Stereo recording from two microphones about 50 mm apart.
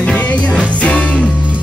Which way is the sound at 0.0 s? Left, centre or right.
Left.